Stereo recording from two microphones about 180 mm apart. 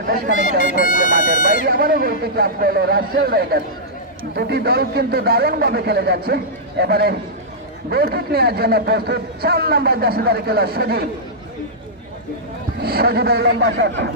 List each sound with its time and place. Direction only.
0.0 s a man's voice: 65° right (ahead or behind)
0.7 s speech: 45° left (ahead or behind)
1.7 s a man's voice: 55° right (ahead or behind)
12.8 s a man's voice: 60° right (ahead or behind)